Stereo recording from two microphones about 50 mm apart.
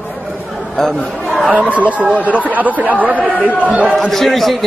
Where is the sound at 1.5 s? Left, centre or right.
Right.